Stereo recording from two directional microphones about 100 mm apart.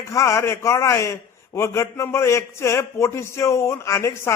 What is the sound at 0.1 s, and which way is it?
A man's voice, 30° left (ahead or behind).